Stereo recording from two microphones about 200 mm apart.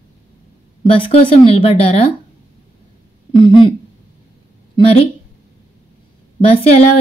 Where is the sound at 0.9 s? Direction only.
25° left (ahead or behind).